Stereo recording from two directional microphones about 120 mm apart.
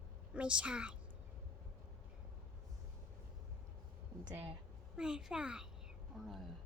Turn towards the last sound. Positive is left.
turn(degrees=0)  # may be behind; listen again after turning